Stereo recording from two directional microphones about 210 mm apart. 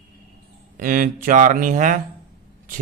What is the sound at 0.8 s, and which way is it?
Speech, 40° right (ahead or behind).